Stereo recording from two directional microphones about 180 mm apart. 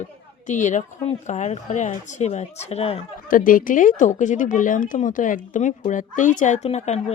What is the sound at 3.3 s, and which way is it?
Speech, 50° left (ahead or behind).